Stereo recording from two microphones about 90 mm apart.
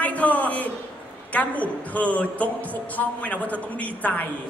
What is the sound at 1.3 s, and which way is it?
A woman's voice, 15° left (ahead or behind).